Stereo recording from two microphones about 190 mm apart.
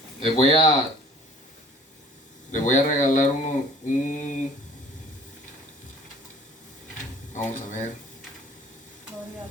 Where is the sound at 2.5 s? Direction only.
40° left (ahead or behind).